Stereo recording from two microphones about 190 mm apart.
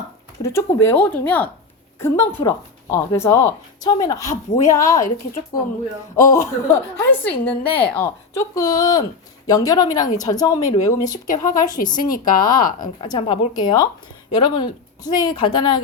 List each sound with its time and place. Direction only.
0.4 s a woman's voice: 15° left (ahead or behind)
6.1 s a woman's voice: 15° left (ahead or behind)
11.9 s speech: 45° left (ahead or behind)
12.8 s speech: 25° left (ahead or behind)